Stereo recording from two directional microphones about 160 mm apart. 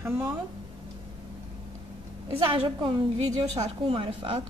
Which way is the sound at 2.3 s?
35° right (ahead or behind).